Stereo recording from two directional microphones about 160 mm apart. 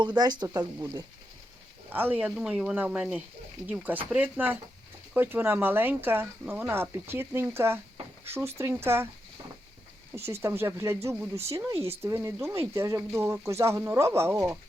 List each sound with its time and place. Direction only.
0.2 s speech: 25° right (ahead or behind)
1.9 s speech: 10° right (ahead or behind)
10.4 s speech: 15° right (ahead or behind)